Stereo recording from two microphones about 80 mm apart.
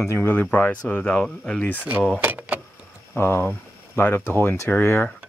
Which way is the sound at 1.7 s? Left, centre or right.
Right.